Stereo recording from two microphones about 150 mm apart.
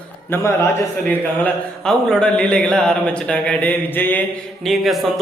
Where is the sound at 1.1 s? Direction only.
5° left (ahead or behind).